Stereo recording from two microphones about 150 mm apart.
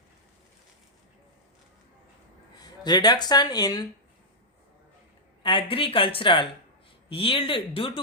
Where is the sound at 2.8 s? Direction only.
30° left (ahead or behind).